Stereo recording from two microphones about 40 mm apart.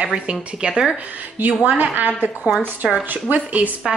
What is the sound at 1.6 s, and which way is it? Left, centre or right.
A woman's voice, right.